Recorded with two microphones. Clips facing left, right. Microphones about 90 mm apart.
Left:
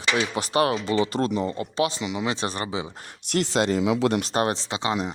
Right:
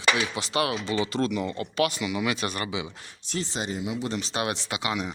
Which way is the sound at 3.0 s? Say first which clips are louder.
Left 7 dB; 65° left (ahead or behind).